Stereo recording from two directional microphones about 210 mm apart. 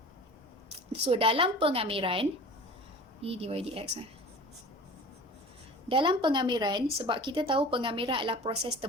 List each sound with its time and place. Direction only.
1.0 s a woman's voice: 25° right (ahead or behind)
5.9 s a woman's voice: 25° right (ahead or behind)